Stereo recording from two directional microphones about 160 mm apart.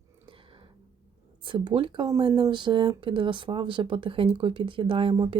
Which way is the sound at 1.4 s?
30° right (ahead or behind).